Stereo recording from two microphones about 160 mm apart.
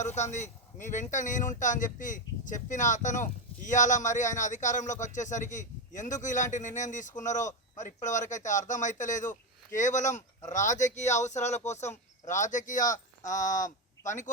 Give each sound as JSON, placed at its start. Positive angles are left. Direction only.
{"t": 0.0, "sound": "speech", "side_deg": 45}